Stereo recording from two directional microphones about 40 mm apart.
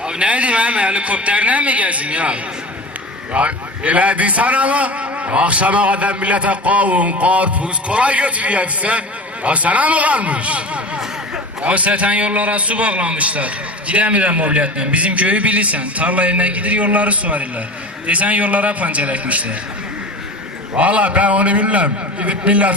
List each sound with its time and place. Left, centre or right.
0.0 s a sound: right
0.3 s a man's voice: right
20.7 s a man's voice: right